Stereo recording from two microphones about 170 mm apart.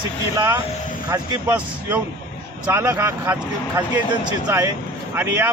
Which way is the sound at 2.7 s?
15° right (ahead or behind).